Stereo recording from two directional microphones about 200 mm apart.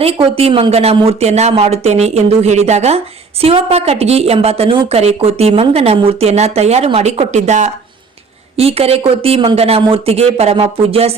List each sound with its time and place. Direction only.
0.0 s a woman's voice: 30° right (ahead or behind)